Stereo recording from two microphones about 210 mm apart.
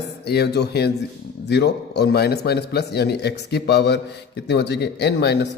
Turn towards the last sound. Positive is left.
turn(degrees=55)  # may be behind; listen again after turning